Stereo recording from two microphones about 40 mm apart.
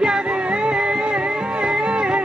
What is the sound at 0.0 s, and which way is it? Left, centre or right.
Music, right.